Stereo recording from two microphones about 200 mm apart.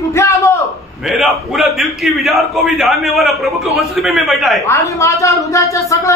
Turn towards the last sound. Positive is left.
turn(degrees=15)  # may be behind; listen again after turning